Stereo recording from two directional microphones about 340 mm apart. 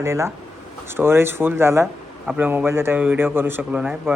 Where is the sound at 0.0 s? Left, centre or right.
Centre.